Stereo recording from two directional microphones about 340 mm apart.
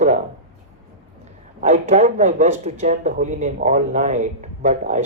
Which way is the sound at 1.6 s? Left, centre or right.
Right.